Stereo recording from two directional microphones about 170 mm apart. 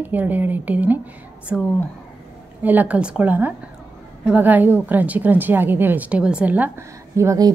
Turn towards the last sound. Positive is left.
turn(degrees=-15)  # may be behind; listen again after turning